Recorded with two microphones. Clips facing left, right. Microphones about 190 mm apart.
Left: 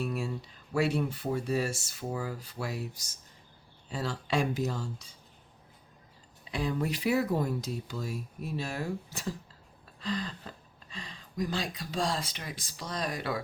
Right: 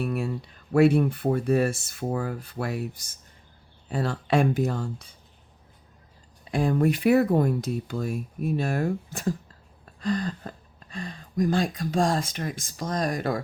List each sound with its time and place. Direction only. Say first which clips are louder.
0.0 s speech: right 5 dB; 60° right (ahead or behind)
6.4 s speech: right 9 dB; 50° right (ahead or behind)